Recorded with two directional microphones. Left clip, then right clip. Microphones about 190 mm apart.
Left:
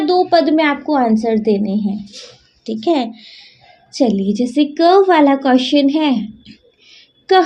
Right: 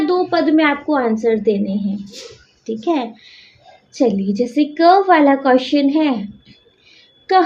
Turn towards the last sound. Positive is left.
turn(degrees=40)  # may be behind; listen again after turning